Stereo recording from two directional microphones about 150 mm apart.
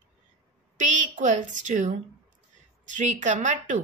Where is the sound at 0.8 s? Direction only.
55° right (ahead or behind).